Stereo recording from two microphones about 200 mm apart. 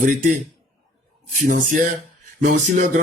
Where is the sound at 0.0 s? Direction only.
40° right (ahead or behind).